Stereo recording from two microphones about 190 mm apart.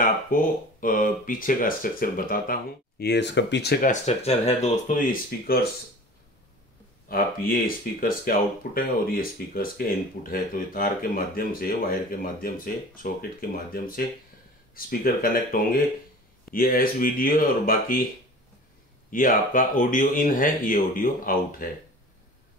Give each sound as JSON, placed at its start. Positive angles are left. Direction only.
{"t": 0.0, "sound": "speech", "side_deg": 45}
{"t": 3.9, "sound": "speech", "side_deg": 35}
{"t": 7.1, "sound": "speech", "side_deg": 50}
{"t": 19.0, "sound": "speech", "side_deg": 45}